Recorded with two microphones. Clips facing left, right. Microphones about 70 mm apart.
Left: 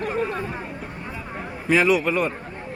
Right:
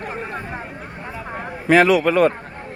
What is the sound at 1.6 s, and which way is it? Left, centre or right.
Speech, right.